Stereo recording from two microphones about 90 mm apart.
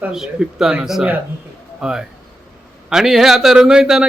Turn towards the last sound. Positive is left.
turn(degrees=-5)  # may be behind; listen again after turning